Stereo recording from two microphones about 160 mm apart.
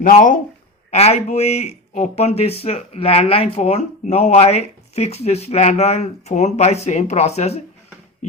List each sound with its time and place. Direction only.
0.0 s speech: 55° left (ahead or behind)
0.9 s speech: 40° left (ahead or behind)